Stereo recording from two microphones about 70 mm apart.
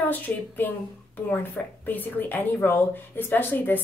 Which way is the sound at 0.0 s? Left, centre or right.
Left.